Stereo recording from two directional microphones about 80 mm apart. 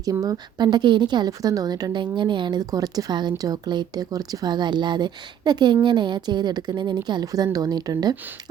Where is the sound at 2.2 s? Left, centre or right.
Right.